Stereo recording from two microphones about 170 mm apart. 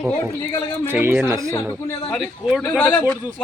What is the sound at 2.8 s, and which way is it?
Speech, 10° left (ahead or behind).